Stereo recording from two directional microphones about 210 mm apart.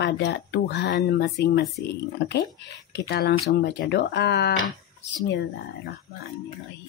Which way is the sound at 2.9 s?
50° left (ahead or behind).